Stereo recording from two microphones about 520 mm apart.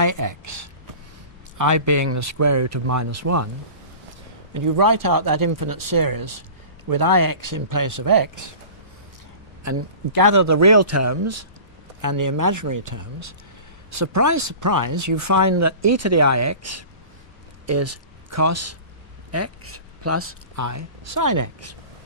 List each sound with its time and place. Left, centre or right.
0.0 s speech: right
4.6 s speech: right
9.6 s speech: right